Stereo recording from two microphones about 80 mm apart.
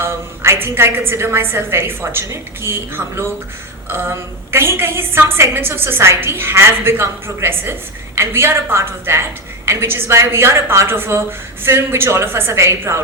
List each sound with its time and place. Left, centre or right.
0.0 s a woman's voice: right